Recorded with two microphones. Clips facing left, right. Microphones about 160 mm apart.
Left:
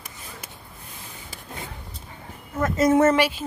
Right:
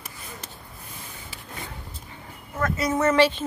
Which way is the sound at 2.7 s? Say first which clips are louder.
Left 7 dB; 45° left (ahead or behind).